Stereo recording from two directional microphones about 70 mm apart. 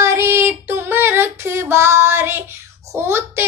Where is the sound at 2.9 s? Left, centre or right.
Right.